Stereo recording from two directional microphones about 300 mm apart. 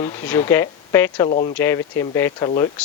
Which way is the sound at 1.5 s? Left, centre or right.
Centre.